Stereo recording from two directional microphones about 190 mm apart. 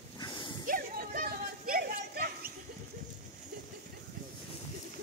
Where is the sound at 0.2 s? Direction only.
25° left (ahead or behind).